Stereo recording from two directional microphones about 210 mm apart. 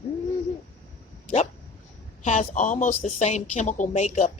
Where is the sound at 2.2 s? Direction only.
35° left (ahead or behind).